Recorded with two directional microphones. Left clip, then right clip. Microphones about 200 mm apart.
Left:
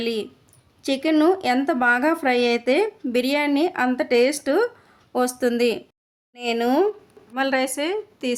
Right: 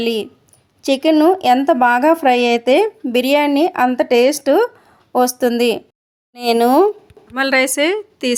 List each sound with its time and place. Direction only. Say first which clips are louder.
0.0 s a woman's voice: right 7 dB; 25° right (ahead or behind)